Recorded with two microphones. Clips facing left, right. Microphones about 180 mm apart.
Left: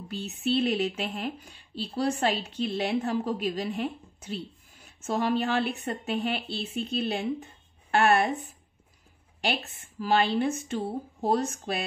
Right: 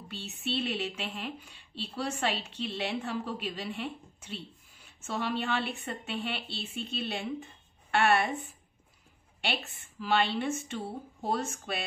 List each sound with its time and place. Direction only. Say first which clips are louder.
0.6 s speech: left 6 dB; 40° left (ahead or behind)
9.4 s speech: left 5 dB; 40° left (ahead or behind)